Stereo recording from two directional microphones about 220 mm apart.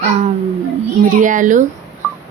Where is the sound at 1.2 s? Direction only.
35° right (ahead or behind).